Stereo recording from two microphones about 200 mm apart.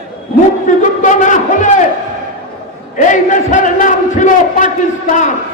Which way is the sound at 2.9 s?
40° left (ahead or behind).